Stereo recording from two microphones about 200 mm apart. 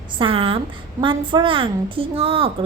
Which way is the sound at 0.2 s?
25° right (ahead or behind).